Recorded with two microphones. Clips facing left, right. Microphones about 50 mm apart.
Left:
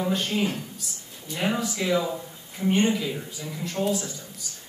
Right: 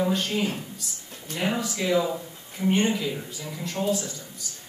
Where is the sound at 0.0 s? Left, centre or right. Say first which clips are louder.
Right 1 dB; centre.